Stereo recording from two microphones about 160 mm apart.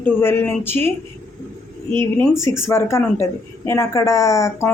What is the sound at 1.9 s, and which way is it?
A woman's voice, 15° left (ahead or behind).